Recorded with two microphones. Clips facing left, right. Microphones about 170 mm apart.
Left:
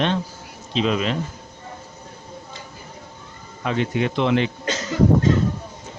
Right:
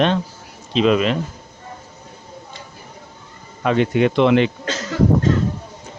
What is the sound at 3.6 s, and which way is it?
Speech, 65° right (ahead or behind).